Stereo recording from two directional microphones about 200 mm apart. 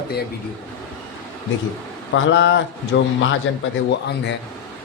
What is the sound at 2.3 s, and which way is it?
Speech, 65° left (ahead or behind).